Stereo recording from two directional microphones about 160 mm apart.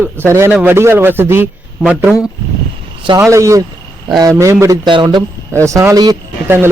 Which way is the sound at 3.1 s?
20° right (ahead or behind).